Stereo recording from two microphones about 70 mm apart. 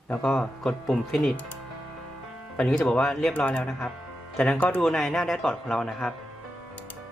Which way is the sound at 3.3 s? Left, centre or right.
Left.